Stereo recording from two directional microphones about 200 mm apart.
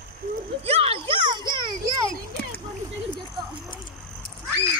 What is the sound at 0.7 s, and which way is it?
Music, 30° right (ahead or behind).